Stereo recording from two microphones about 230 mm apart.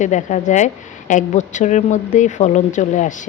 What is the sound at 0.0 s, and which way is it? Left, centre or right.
Speech, left.